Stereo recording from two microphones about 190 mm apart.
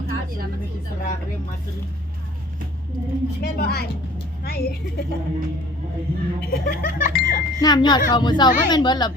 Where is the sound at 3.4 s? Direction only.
55° left (ahead or behind).